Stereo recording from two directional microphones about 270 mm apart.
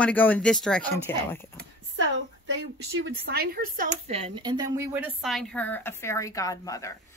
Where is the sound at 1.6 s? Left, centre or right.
Right; by 7.0 s centre.